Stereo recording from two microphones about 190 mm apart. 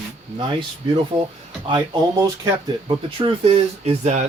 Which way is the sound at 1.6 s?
20° right (ahead or behind).